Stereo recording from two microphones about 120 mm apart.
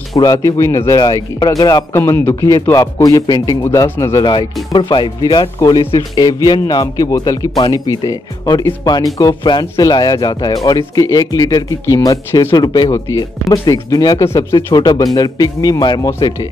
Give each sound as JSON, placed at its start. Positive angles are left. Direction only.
{"t": 0.2, "sound": "speech", "side_deg": 30}
{"t": 4.2, "sound": "speech", "side_deg": 40}
{"t": 12.5, "sound": "speech", "side_deg": 35}